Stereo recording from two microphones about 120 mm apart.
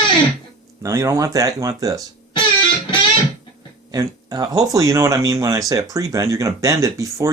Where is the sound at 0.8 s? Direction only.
25° right (ahead or behind).